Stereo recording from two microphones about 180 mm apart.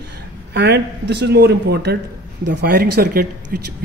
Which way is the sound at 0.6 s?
70° right (ahead or behind).